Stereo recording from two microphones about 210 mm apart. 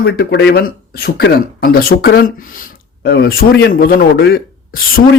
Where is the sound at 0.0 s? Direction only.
50° left (ahead or behind).